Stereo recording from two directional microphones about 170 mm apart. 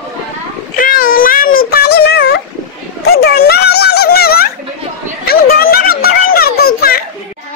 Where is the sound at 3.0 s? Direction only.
70° left (ahead or behind).